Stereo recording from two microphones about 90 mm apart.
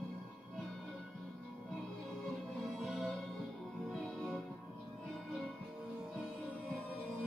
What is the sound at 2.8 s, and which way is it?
Music, centre (ahead or behind).